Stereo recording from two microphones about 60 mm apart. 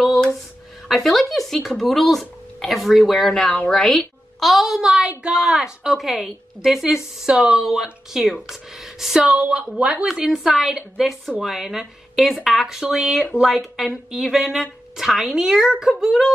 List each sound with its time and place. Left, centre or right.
0.8 s a woman's voice: centre
9.2 s speech: centre
10.0 s a woman's voice: centre